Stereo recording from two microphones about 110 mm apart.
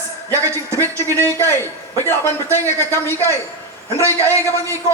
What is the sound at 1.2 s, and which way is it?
A man's voice, 20° left (ahead or behind).